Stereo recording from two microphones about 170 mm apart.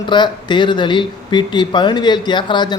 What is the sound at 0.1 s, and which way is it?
Speech, 25° left (ahead or behind).